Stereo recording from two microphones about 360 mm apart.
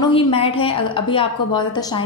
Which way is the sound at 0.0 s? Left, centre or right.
Centre.